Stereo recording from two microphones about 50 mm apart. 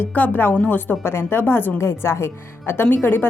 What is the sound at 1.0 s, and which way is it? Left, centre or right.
Speech, left.